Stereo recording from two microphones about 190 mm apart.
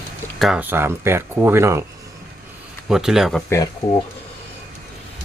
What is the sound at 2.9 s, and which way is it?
Speech, centre (ahead or behind).